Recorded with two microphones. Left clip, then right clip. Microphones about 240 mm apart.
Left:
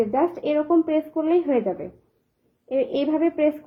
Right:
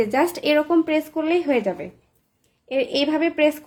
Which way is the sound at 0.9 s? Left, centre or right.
Centre.